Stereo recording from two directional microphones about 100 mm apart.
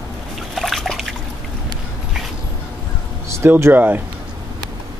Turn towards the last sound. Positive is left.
turn(degrees=-20)  # may be behind; listen again after turning